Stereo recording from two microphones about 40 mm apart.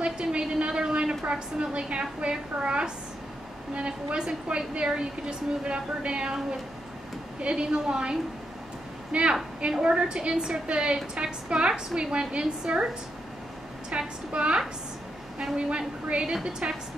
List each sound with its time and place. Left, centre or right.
0.0 s a sound: right
3.7 s a woman's voice: right
7.3 s a woman's voice: right
15.4 s a woman's voice: centre
16.4 s a woman's voice: centre